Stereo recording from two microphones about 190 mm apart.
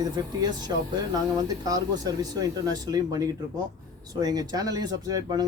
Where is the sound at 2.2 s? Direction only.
20° right (ahead or behind).